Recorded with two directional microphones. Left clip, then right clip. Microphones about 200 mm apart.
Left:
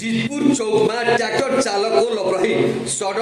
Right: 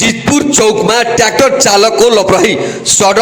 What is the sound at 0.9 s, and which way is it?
A man's voice, 40° right (ahead or behind).